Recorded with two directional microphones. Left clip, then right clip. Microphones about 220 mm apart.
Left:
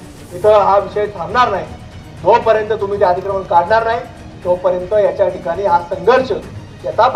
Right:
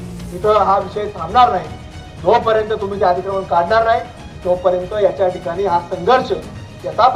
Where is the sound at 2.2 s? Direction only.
40° left (ahead or behind).